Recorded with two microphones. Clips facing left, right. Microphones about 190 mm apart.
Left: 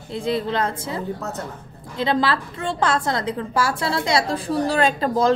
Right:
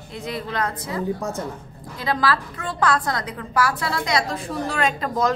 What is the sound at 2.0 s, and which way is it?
A woman's voice, 25° left (ahead or behind).